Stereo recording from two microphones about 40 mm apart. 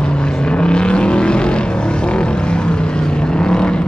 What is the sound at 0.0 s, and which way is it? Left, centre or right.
Vehicle, left.